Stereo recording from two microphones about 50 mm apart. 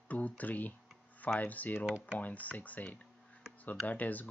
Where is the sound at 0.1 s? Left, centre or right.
Left.